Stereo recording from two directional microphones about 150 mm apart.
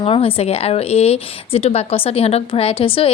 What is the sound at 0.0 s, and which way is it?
Speech, 35° left (ahead or behind).